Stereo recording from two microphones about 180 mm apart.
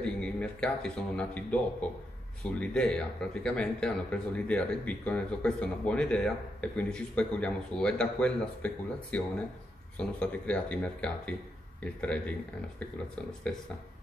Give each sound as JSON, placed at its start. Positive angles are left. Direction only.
{"t": 0.0, "sound": "speech", "side_deg": 5}